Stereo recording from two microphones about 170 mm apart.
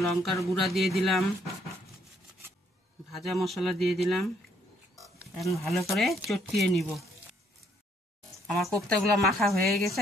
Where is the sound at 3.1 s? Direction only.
Centre (ahead or behind).